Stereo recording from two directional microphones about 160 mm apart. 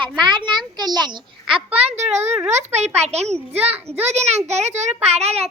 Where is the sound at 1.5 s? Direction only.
40° right (ahead or behind).